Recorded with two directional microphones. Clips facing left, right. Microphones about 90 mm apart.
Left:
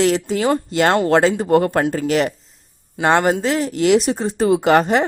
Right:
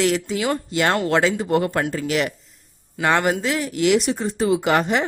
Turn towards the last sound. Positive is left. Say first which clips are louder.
# left 5 dB
turn(degrees=40)  # may be behind; listen again after turning